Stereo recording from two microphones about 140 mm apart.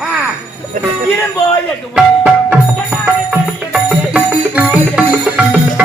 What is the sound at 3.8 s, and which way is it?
Music, 10° right (ahead or behind).